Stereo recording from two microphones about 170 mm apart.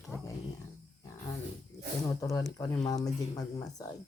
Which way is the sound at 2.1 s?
20° left (ahead or behind).